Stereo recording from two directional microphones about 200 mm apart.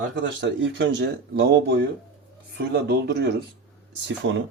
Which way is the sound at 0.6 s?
60° right (ahead or behind).